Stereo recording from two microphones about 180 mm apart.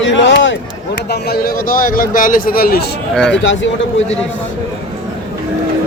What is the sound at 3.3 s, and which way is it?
Speech, 90° left.